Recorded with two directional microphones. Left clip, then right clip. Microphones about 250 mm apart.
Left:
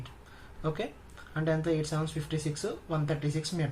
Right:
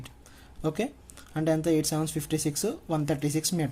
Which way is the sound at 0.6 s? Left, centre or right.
Right.